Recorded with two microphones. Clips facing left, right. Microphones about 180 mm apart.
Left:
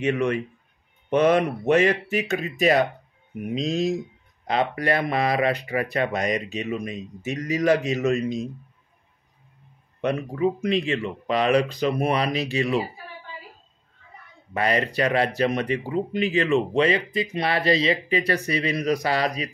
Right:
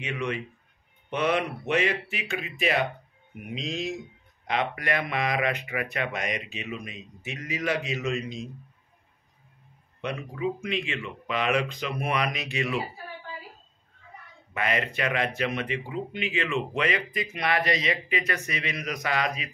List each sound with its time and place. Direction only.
0.0 s speech: 45° left (ahead or behind)
10.0 s speech: 45° left (ahead or behind)
14.5 s speech: 35° left (ahead or behind)